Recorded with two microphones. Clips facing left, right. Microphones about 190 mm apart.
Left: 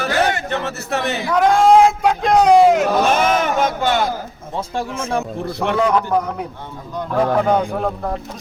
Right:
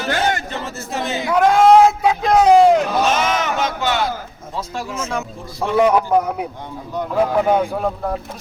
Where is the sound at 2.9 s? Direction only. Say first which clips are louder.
Left 2 dB; 50° left (ahead or behind).